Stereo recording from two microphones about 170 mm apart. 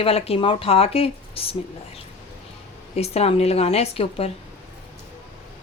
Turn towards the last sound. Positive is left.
turn(degrees=35)  # may be behind; listen again after turning